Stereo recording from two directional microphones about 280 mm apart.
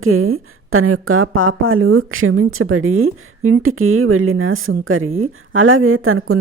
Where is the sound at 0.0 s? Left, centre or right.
Right.